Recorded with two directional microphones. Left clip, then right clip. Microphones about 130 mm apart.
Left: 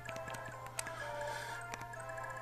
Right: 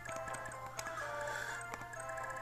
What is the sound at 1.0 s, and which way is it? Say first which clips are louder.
Music: right 2 dB; 25° right (ahead or behind).